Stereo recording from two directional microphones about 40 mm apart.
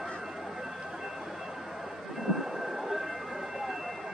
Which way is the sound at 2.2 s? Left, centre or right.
Centre.